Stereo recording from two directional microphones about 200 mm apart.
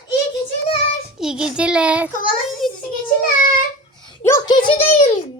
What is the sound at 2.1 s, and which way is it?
Child singing, 45° left (ahead or behind).